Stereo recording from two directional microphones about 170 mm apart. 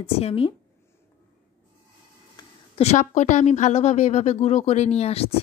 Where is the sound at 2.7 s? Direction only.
40° left (ahead or behind).